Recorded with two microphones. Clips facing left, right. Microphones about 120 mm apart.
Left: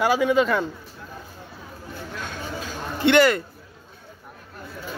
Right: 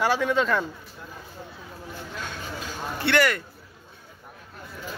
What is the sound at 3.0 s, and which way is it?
Speech, 20° left (ahead or behind).